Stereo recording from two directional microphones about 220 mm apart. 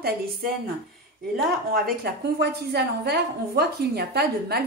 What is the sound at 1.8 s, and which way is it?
A woman's voice, 45° right (ahead or behind).